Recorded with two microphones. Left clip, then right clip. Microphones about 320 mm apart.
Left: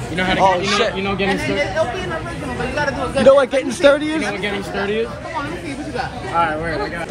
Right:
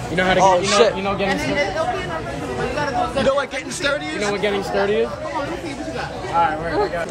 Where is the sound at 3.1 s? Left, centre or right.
Centre.